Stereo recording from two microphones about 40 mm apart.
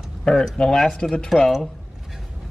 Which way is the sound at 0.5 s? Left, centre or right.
Centre.